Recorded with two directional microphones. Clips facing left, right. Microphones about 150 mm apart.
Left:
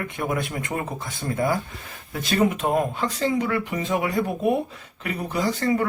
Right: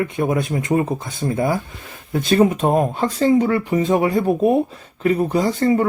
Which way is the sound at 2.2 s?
35° right (ahead or behind).